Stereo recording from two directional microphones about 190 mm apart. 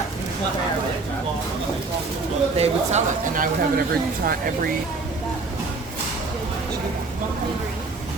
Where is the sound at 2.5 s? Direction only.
35° right (ahead or behind).